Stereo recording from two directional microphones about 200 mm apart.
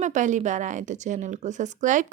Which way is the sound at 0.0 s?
35° right (ahead or behind).